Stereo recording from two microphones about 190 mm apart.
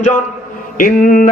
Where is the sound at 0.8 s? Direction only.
45° left (ahead or behind).